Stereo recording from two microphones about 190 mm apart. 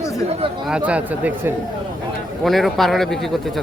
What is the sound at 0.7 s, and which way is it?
Speech, 5° right (ahead or behind).